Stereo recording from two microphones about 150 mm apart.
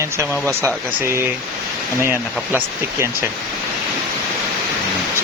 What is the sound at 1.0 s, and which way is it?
Speech, 15° right (ahead or behind).